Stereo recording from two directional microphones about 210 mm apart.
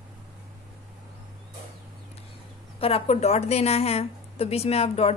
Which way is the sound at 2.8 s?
25° left (ahead or behind).